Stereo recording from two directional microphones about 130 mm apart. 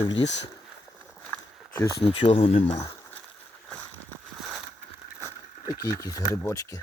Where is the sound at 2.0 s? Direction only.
45° left (ahead or behind).